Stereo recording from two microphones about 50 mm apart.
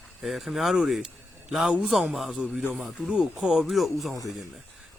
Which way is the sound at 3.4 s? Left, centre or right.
Centre.